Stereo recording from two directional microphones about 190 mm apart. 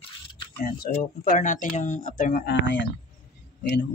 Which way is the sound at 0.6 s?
50° left (ahead or behind).